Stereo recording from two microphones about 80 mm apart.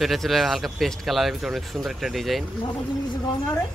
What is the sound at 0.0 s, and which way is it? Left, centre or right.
Speech, centre.